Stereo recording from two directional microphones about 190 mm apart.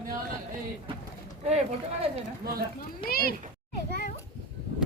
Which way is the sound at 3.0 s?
50° left (ahead or behind).